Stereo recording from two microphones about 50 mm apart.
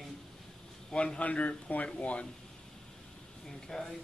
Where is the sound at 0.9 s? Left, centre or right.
Left.